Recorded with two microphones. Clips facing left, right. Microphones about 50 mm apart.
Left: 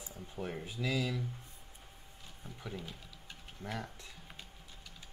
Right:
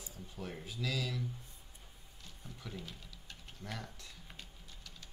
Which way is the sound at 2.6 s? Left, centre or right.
Centre.